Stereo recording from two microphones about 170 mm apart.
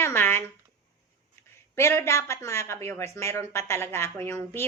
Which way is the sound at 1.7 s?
15° left (ahead or behind).